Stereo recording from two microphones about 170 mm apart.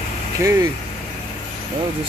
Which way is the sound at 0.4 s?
15° right (ahead or behind).